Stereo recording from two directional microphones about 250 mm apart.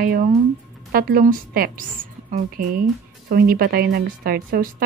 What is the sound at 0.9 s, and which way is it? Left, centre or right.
Speech, right.